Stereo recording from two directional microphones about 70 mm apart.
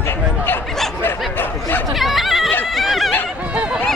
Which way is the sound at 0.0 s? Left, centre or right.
Left.